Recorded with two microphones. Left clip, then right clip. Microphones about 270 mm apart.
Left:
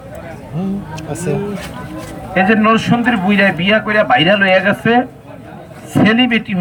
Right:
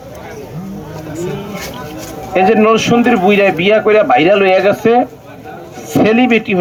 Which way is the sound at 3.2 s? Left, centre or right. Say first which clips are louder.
Right 2 dB; centre.